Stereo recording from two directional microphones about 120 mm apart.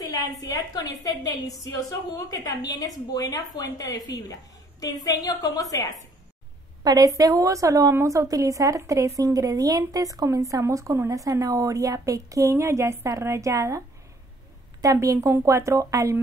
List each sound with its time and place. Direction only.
0.0 s a woman's voice: 30° left (ahead or behind)
6.8 s a woman's voice: 35° right (ahead or behind)